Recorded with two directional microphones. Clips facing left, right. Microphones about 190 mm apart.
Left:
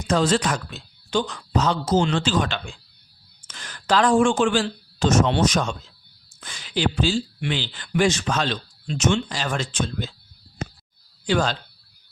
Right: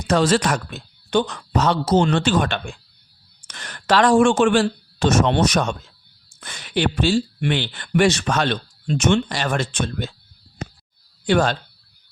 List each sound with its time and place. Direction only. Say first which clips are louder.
0.1 s speech: right 3 dB; 70° right (ahead or behind)
2.1 s speech: right 3 dB; 60° right (ahead or behind)
11.3 s speech: right 4 dB; 55° right (ahead or behind)